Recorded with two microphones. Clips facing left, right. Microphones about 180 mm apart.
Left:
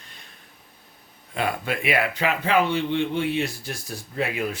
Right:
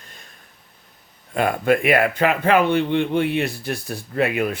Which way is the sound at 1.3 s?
50° right (ahead or behind).